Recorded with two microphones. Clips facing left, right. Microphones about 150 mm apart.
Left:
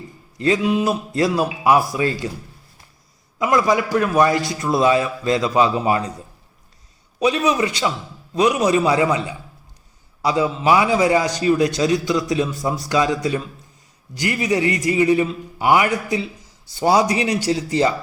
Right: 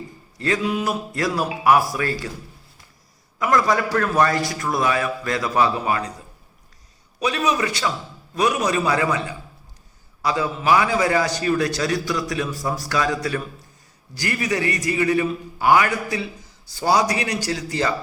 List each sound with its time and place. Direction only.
0.3 s a man's voice: 20° left (ahead or behind)
3.3 s a man's voice: 15° left (ahead or behind)
7.3 s a man's voice: 20° left (ahead or behind)